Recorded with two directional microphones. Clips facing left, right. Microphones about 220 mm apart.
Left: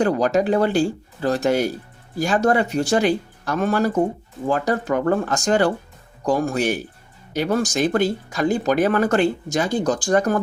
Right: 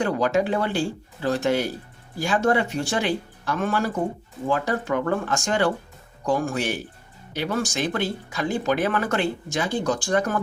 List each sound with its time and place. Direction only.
0.0 s speech: 40° left (ahead or behind)